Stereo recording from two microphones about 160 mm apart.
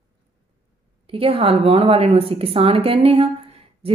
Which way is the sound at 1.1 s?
35° right (ahead or behind).